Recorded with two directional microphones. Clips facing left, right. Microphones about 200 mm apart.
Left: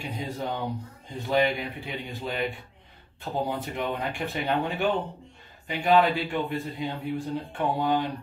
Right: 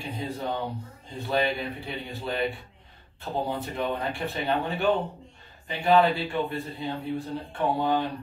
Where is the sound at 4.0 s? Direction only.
15° left (ahead or behind).